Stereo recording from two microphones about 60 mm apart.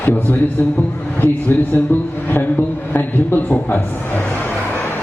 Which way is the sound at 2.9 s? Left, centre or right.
Left.